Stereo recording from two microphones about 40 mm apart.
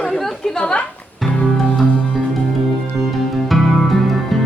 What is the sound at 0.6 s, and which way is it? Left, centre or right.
Speech, left.